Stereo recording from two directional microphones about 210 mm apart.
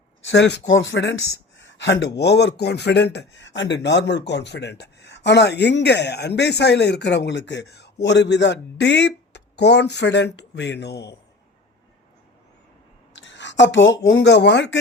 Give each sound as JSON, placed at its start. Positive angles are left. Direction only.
{"t": 0.3, "sound": "speech", "side_deg": 55}
{"t": 13.1, "sound": "speech", "side_deg": 60}